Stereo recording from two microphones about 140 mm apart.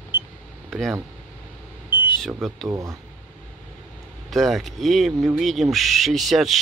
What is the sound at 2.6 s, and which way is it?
Speech, 25° right (ahead or behind).